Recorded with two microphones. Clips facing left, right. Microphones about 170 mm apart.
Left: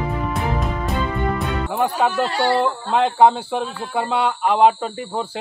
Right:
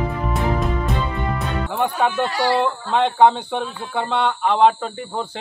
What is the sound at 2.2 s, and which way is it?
Speech, 30° left (ahead or behind).